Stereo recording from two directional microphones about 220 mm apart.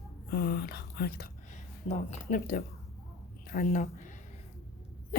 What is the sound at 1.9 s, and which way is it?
Speech, 30° left (ahead or behind).